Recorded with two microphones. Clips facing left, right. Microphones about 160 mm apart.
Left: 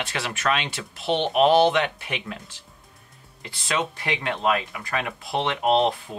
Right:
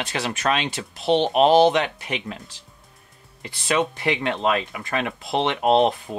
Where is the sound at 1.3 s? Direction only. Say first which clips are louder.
Right 1 dB; 25° right (ahead or behind).